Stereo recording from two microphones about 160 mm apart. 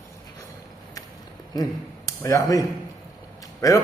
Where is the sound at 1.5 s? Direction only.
20° left (ahead or behind).